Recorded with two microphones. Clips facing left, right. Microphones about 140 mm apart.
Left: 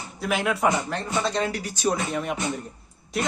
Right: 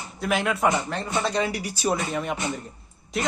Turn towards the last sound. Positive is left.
turn(degrees=0)  # may be behind; listen again after turning